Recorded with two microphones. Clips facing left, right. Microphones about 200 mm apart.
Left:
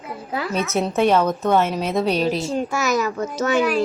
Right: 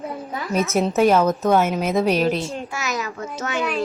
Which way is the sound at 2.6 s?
40° left (ahead or behind).